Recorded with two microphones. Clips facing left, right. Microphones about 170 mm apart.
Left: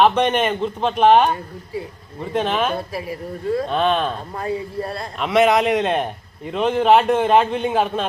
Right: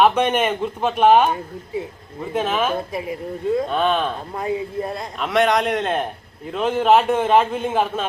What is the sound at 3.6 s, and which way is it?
Speech, centre (ahead or behind).